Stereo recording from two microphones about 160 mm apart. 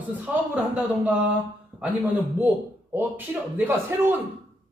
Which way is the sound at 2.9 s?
10° right (ahead or behind).